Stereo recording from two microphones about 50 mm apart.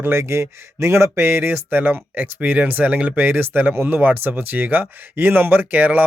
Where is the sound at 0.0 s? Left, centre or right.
Right.